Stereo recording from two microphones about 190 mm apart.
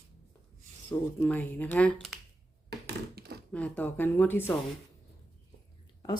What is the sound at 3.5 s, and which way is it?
Speech, 10° left (ahead or behind).